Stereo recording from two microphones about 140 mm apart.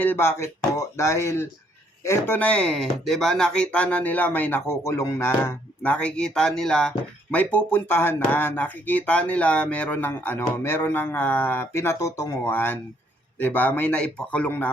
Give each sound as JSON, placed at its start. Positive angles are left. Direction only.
{"t": 0.0, "sound": "speech", "side_deg": 15}